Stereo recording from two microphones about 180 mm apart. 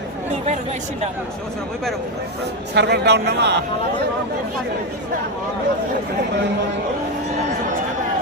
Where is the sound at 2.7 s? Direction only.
70° right (ahead or behind).